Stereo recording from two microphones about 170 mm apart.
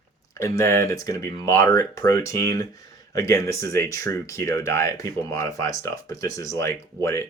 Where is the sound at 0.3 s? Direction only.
15° left (ahead or behind).